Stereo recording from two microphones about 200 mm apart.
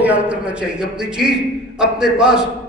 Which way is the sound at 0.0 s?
5° right (ahead or behind).